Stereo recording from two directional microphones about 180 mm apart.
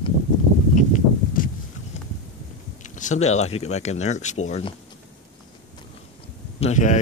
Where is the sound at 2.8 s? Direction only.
45° left (ahead or behind).